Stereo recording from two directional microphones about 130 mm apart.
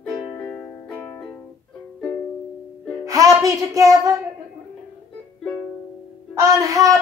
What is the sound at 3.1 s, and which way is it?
Speech, 25° right (ahead or behind).